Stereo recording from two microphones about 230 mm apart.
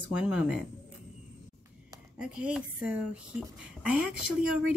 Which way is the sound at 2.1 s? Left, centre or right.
Centre.